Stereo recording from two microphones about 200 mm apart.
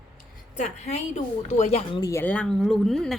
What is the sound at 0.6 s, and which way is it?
A woman's voice, 35° left (ahead or behind).